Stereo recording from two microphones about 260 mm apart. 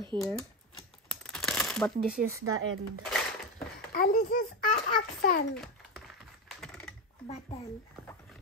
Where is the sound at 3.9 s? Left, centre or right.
Left.